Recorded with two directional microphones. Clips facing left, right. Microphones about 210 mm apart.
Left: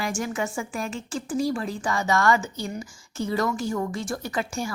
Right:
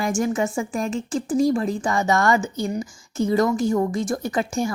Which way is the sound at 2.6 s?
40° right (ahead or behind).